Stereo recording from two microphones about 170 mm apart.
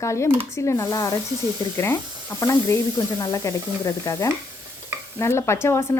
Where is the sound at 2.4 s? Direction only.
20° left (ahead or behind).